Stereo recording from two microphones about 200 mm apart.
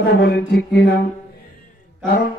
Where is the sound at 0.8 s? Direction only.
50° left (ahead or behind).